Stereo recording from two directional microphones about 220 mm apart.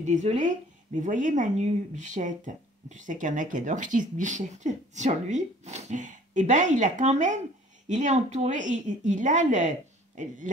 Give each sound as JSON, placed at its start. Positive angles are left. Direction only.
{"t": 0.0, "sound": "speech", "side_deg": -35}